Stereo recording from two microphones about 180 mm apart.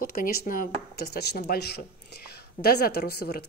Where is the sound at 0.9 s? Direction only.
65° left (ahead or behind).